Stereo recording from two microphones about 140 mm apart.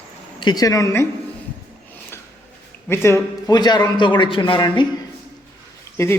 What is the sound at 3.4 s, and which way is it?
Speech, 30° left (ahead or behind).